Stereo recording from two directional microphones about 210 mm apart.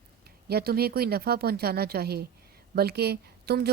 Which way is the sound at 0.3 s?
50° right (ahead or behind).